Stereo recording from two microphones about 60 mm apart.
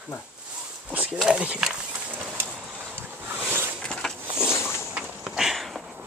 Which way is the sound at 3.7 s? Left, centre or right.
Centre.